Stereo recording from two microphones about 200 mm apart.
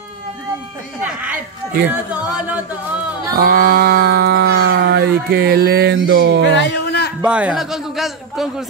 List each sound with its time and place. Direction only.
1.0 s a man's voice: 5° right (ahead or behind)
2.1 s yodeling: 5° right (ahead or behind)
3.3 s speech: 45° right (ahead or behind)
6.5 s a sound: 60° left (ahead or behind)
7.2 s a man's voice: 5° right (ahead or behind)